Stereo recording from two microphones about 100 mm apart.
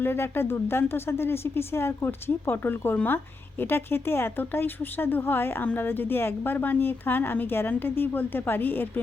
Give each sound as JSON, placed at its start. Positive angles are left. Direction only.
{"t": 0.0, "sound": "speech", "side_deg": 25}